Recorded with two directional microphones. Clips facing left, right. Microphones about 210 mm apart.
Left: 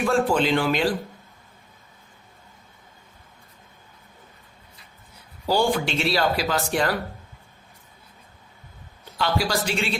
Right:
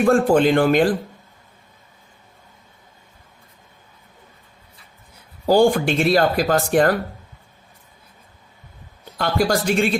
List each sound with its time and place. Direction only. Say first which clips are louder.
0.0 s speech: right 6 dB; 50° right (ahead or behind)
5.5 s speech: right 7 dB; 50° right (ahead or behind)
9.1 s speech: right 5 dB; 50° right (ahead or behind)